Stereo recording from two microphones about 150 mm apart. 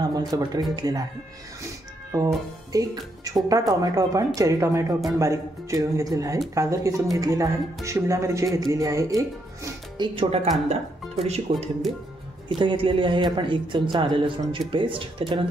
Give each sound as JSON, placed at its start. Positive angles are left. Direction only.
{"t": 0.1, "sound": "a woman's voice", "side_deg": -25}
{"t": 2.1, "sound": "a woman's voice", "side_deg": -25}